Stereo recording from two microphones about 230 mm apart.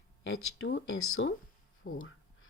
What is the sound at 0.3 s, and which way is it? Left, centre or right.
Speech, left.